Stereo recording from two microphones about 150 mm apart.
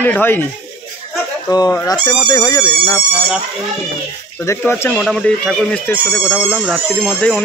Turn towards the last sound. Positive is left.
turn(degrees=0)  # may be behind; listen again after turning